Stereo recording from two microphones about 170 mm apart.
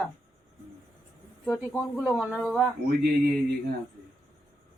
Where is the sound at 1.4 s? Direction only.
5° left (ahead or behind).